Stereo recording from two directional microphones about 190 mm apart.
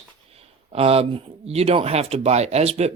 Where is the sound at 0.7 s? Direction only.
30° right (ahead or behind).